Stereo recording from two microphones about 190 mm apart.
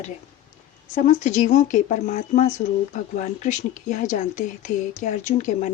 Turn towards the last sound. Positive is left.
turn(degrees=40)  # may be behind; listen again after turning